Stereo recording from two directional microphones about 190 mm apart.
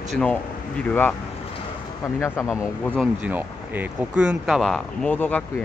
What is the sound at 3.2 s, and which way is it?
Speech, 10° right (ahead or behind).